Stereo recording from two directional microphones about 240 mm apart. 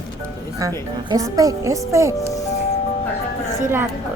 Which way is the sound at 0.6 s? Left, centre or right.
Centre.